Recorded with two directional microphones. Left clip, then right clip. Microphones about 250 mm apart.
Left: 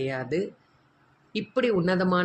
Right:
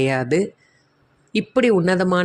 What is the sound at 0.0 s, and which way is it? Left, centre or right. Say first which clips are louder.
Speech: right 9 dB; right.